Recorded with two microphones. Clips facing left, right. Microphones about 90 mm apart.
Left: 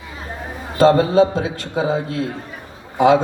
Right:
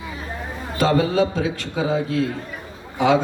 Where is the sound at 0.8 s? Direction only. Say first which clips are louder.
Left 6 dB; 35° left (ahead or behind).